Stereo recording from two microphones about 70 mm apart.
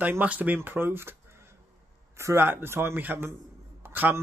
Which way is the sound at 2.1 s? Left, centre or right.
Right.